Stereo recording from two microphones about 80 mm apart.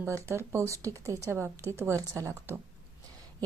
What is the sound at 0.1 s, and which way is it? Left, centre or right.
A woman's voice, right.